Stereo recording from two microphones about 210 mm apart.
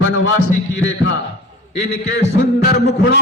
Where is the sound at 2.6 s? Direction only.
40° left (ahead or behind).